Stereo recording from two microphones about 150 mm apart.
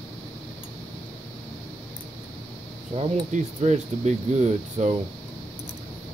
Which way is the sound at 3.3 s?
50° right (ahead or behind).